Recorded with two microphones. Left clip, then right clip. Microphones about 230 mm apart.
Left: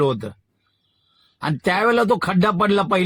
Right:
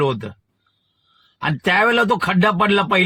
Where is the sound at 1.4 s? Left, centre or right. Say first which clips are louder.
Right 3 dB; right.